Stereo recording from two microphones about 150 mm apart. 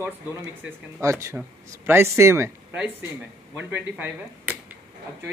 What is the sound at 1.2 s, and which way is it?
Speech, 15° right (ahead or behind).